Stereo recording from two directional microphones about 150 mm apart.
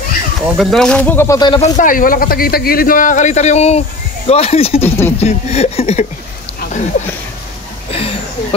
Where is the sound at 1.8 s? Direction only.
65° left (ahead or behind); by 6.0 s 45° left (ahead or behind).